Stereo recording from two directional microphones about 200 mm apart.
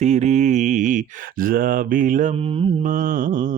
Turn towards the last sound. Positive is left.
turn(degrees=-40)  # may be behind; listen again after turning